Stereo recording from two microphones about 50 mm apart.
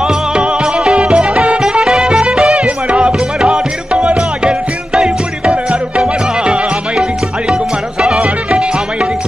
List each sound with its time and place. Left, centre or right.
0.0 s music: centre